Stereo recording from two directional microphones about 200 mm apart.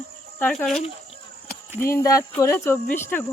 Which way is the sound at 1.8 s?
15° left (ahead or behind).